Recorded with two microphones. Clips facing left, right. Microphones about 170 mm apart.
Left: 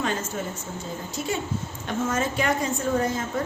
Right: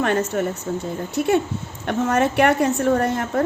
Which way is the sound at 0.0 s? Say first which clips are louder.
Right 8 dB; 65° right (ahead or behind).